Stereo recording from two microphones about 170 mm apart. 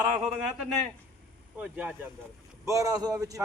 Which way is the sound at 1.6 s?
5° right (ahead or behind).